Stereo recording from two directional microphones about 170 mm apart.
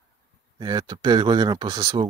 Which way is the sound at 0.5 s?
25° right (ahead or behind).